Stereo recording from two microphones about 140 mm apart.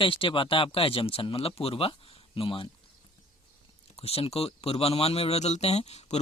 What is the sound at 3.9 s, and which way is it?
Speech, 45° left (ahead or behind).